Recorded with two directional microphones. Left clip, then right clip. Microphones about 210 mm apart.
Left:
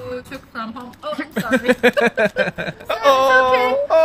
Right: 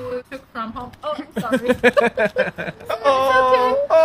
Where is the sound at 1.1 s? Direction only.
15° left (ahead or behind).